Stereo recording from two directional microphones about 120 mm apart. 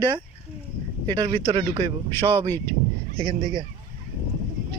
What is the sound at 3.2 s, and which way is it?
Speech, 40° right (ahead or behind).